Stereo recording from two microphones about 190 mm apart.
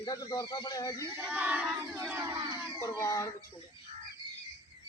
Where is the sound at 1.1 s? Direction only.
10° right (ahead or behind).